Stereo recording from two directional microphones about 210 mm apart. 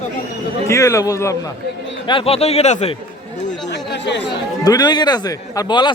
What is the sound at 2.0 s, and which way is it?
Speech, 25° left (ahead or behind).